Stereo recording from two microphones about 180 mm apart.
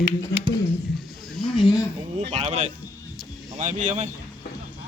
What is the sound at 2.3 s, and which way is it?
Speech, 40° right (ahead or behind).